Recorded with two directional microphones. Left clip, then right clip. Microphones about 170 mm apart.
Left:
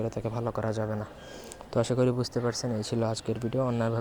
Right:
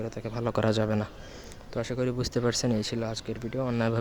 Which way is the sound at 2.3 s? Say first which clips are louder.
Right 3 dB; 35° right (ahead or behind).